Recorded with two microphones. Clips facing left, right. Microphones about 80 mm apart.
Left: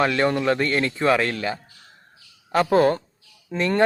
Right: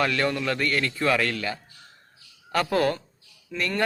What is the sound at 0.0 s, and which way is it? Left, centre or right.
Speech, left.